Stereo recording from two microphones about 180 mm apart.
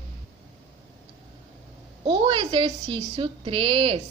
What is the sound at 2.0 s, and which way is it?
A woman's voice, 25° right (ahead or behind).